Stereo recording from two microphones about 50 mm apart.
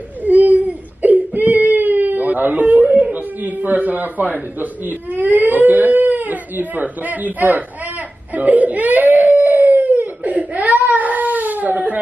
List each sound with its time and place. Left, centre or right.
0.2 s baby cry: right